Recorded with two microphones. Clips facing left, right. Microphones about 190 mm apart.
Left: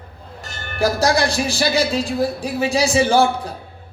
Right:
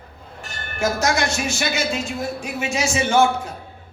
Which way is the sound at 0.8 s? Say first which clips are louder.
Left 4 dB; 35° left (ahead or behind).